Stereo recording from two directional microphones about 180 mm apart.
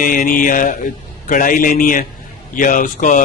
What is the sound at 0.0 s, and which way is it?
Speech, 50° left (ahead or behind).